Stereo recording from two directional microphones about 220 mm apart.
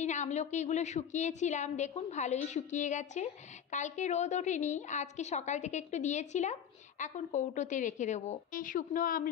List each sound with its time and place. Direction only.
0.0 s a woman's voice: 30° left (ahead or behind)